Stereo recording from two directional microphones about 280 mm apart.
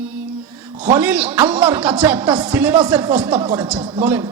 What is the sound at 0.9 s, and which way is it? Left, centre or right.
Speech, centre.